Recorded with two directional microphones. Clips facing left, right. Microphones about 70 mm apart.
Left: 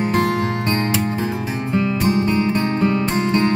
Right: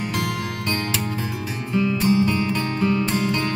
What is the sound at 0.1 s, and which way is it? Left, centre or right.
Music, left.